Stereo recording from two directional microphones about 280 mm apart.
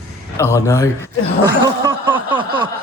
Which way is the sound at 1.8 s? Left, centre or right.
Centre.